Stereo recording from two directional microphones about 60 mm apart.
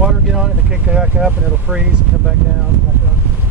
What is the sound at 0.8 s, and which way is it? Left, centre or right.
Speech, right.